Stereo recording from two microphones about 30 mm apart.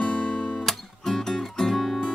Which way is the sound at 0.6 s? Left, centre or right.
Centre.